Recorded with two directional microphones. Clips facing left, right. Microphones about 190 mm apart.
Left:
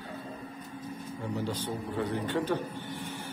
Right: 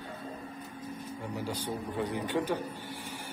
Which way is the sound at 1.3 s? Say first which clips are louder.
Left 2 dB; 10° right (ahead or behind).